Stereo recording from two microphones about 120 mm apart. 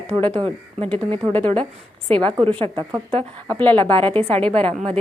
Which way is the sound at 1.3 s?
10° left (ahead or behind).